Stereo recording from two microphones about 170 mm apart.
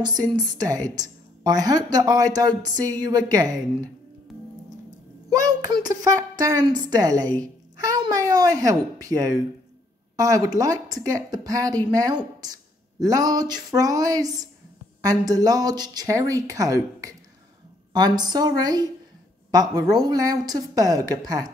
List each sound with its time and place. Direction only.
0.3 s a woman's voice: 25° right (ahead or behind)
5.3 s a woman's voice: 20° right (ahead or behind)
7.3 s a sound: 20° right (ahead or behind)
9.0 s a woman's voice: 20° right (ahead or behind)